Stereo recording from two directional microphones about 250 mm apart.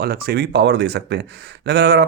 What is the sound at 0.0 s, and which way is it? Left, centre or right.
Speech, right.